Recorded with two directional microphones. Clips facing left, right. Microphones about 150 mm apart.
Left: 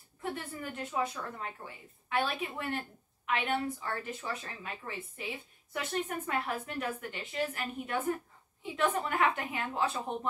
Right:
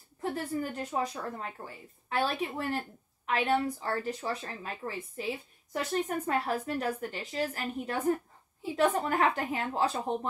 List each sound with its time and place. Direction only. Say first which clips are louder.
0.2 s a woman's voice: right 6 dB; 40° right (ahead or behind)